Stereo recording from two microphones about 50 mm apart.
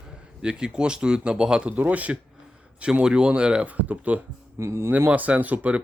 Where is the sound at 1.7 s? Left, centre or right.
Right.